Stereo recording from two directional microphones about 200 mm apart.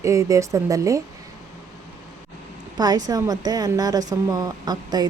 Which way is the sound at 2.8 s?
20° right (ahead or behind).